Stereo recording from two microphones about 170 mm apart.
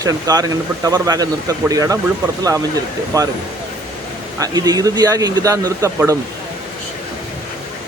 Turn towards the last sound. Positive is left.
turn(degrees=-20)  # may be behind; listen again after turning